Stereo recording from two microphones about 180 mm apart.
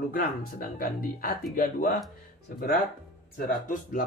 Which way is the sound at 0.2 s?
50° left (ahead or behind).